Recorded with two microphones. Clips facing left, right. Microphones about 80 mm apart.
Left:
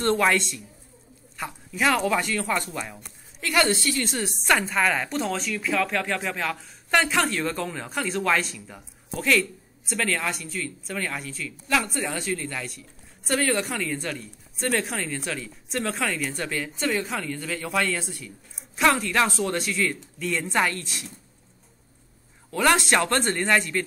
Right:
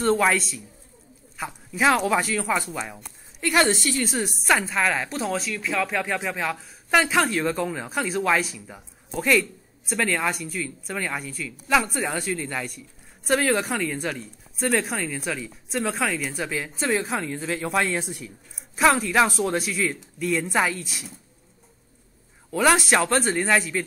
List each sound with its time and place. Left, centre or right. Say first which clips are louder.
0.0 s speech: right 1 dB; centre
1.7 s speech: right 2 dB; centre
3.5 s a man's voice: right 1 dB; centre
3.9 s a man's voice: right 2 dB; centre
18.5 s speech: right 2 dB; centre
22.5 s speech: right 1 dB; centre